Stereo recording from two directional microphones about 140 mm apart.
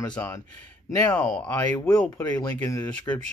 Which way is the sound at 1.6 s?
25° left (ahead or behind).